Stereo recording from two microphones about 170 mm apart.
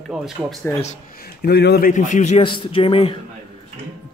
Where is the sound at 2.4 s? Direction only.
30° left (ahead or behind).